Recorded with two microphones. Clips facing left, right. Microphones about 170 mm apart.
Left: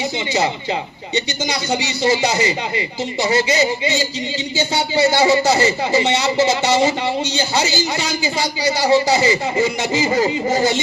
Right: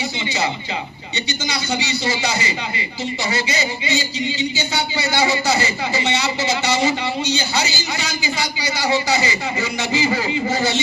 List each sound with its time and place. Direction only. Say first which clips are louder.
1.5 s speech: left 2 dB; 50° left (ahead or behind)
8.6 s a man's voice: left 6 dB; 35° left (ahead or behind)
9.6 s speech: left 4 dB; 45° left (ahead or behind)